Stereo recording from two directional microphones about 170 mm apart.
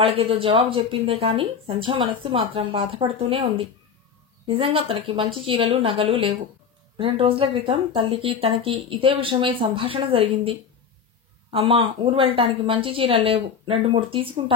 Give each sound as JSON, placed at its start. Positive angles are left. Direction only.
{"t": 0.0, "sound": "speech", "side_deg": -35}
{"t": 11.5, "sound": "speech", "side_deg": -30}